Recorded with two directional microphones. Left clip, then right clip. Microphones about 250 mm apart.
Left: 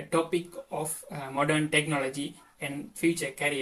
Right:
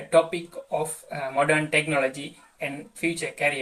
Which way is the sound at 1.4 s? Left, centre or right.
Left.